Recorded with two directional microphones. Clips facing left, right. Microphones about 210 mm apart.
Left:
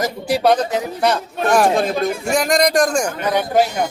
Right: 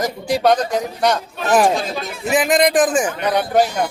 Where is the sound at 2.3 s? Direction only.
5° right (ahead or behind).